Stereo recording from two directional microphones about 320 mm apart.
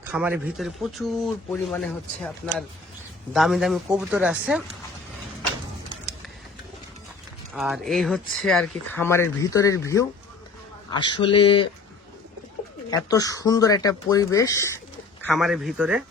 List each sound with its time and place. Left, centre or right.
0.1 s speech: centre
7.5 s speech: centre
12.9 s speech: centre